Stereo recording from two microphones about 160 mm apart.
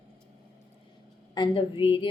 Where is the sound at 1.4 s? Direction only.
35° left (ahead or behind).